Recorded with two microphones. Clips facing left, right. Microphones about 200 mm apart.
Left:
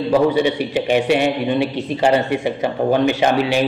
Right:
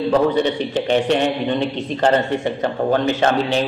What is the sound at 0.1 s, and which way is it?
A man's voice, 10° left (ahead or behind).